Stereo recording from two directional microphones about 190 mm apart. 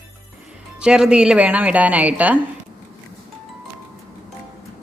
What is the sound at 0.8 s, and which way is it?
A woman's voice, 5° right (ahead or behind).